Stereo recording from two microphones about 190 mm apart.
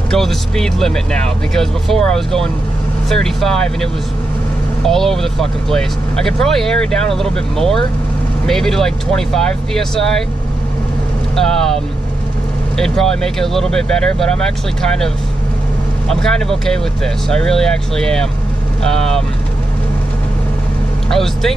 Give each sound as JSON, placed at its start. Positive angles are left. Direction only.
{"t": 0.1, "sound": "speech", "side_deg": 0}
{"t": 11.3, "sound": "speech", "side_deg": 0}
{"t": 16.1, "sound": "speech", "side_deg": 5}
{"t": 21.1, "sound": "speech", "side_deg": 0}